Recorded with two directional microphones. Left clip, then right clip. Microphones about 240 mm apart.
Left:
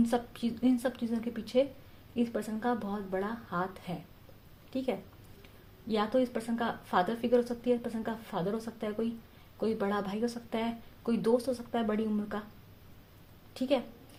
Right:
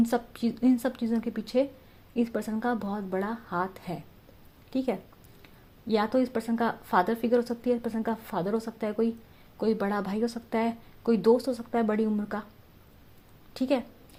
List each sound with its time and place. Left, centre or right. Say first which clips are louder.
0.0 s speech: right 3 dB; right
5.9 s speech: right 4 dB; right
13.5 s a woman's voice: right 3 dB; right